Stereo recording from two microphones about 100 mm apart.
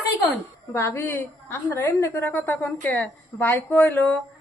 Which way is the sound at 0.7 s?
25° left (ahead or behind).